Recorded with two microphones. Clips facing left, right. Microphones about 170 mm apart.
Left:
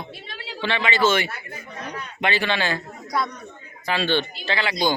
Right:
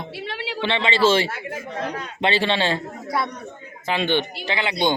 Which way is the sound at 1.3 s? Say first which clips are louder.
Right 7 dB; 90° right.